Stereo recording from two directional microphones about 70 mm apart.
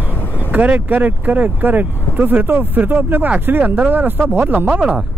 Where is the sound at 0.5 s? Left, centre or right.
Right.